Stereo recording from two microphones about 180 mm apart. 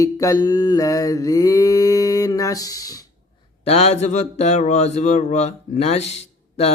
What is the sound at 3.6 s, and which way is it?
A man's voice, 35° left (ahead or behind).